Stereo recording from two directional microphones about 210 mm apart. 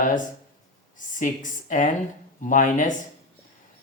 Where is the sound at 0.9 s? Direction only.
40° left (ahead or behind).